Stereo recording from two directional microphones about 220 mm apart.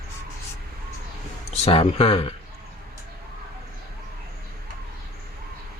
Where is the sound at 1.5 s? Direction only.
25° left (ahead or behind).